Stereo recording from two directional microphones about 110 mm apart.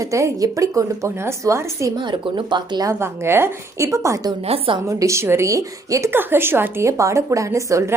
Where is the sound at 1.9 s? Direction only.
45° right (ahead or behind).